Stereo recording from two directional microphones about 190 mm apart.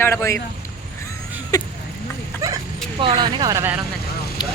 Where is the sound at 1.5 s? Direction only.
20° left (ahead or behind).